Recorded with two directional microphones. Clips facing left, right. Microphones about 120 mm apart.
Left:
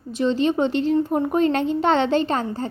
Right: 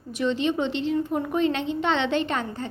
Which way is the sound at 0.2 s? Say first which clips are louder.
Left 4 dB; 35° left (ahead or behind).